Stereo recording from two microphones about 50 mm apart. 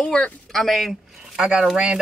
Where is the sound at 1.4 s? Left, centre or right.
Centre.